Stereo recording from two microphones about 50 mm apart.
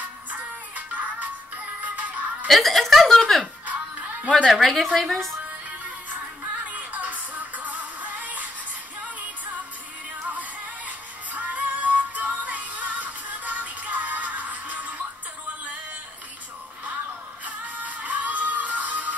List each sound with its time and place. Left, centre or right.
0.3 s music: right
2.4 s speech: centre
3.6 s music: right
4.5 s speech: centre
6.6 s music: right
10.9 s music: right
17.5 s music: right